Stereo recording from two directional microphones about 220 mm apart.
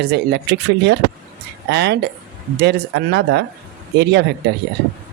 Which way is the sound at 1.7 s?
50° right (ahead or behind).